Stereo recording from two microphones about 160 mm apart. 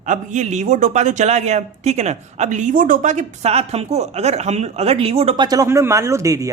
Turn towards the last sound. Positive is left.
turn(degrees=-20)  # may be behind; listen again after turning